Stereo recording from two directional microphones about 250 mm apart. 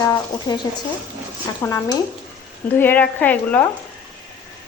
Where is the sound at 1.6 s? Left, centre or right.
Centre.